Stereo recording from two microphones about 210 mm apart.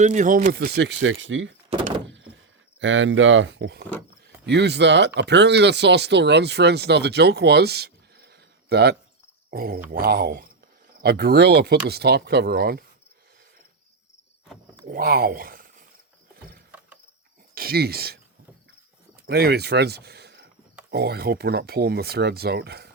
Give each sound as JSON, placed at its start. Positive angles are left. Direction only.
{"t": 0.0, "sound": "speech", "side_deg": -35}
{"t": 2.0, "sound": "door", "side_deg": -60}
{"t": 2.8, "sound": "speech", "side_deg": -65}
{"t": 14.8, "sound": "speech", "side_deg": -45}
{"t": 17.5, "sound": "speech", "side_deg": -45}
{"t": 19.3, "sound": "speech", "side_deg": -50}